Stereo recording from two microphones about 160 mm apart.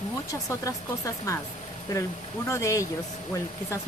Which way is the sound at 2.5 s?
20° left (ahead or behind).